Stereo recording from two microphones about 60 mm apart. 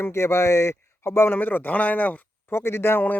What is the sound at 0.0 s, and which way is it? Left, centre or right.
Speech, left.